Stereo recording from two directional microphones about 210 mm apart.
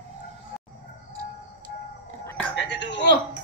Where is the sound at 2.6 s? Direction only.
55° left (ahead or behind).